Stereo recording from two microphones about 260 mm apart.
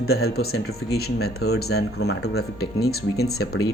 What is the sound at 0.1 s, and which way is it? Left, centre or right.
Speech, left.